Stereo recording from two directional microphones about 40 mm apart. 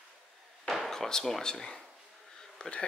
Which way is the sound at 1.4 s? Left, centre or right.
Centre.